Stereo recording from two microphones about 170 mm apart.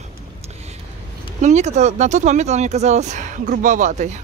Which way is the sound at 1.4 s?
45° right (ahead or behind).